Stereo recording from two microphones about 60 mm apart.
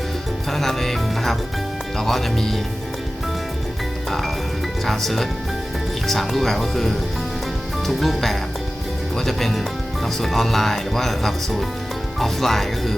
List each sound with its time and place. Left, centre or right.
0.5 s speech: centre
4.9 s speech: centre